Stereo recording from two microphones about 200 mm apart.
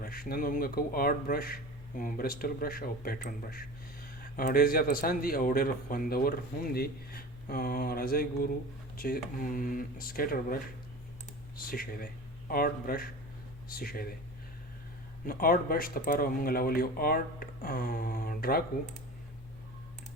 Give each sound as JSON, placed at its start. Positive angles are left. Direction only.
{"t": 0.0, "sound": "a man's voice", "side_deg": 45}
{"t": 15.3, "sound": "a man's voice", "side_deg": 45}